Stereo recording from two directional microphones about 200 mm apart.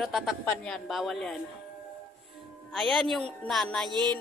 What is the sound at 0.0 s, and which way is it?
Speech, centre (ahead or behind).